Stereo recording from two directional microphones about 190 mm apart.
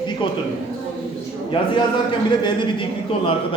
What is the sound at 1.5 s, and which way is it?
A man's voice, 25° left (ahead or behind).